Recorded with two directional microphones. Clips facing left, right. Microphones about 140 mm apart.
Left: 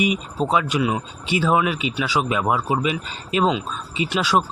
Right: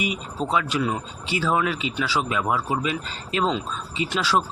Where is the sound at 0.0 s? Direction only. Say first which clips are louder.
Left 6 dB; 20° left (ahead or behind).